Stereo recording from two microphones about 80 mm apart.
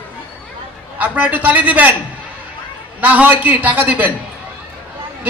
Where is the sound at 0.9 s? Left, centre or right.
Right.